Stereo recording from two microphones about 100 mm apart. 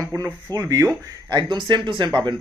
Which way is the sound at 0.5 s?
40° right (ahead or behind).